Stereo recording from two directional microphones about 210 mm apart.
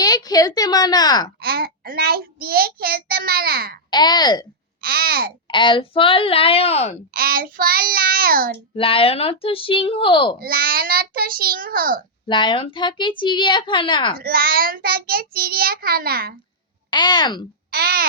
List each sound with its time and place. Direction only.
0.0 s a woman's voice: 20° left (ahead or behind)
1.4 s child singing: 45° right (ahead or behind)
3.9 s speech: 20° left (ahead or behind)
4.8 s child singing: 45° right (ahead or behind)
5.5 s speech: 25° left (ahead or behind)
7.1 s child singing: 45° right (ahead or behind)
8.7 s speech: 25° left (ahead or behind)
10.4 s child singing: 45° right (ahead or behind)
12.3 s speech: 20° left (ahead or behind)
14.2 s child singing: 45° right (ahead or behind)
16.9 s speech: 20° left (ahead or behind)
17.7 s speech: 45° right (ahead or behind)